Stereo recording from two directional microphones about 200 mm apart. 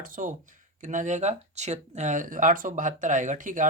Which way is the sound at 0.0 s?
40° right (ahead or behind).